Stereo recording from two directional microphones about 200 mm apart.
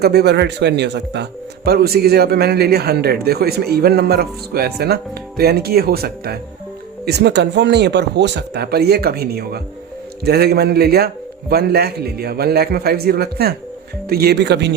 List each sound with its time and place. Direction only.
0.0 s speech: 55° right (ahead or behind)